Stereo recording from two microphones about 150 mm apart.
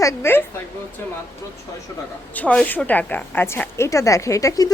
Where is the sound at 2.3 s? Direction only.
10° left (ahead or behind).